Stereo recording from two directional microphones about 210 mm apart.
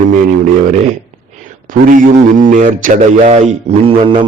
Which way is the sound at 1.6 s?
40° right (ahead or behind).